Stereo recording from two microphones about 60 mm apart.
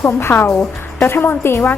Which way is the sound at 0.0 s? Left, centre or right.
Left.